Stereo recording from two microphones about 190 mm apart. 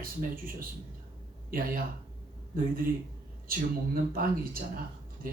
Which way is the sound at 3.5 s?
50° right (ahead or behind).